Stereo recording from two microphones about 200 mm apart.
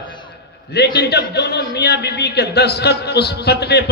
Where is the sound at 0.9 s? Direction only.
55° left (ahead or behind).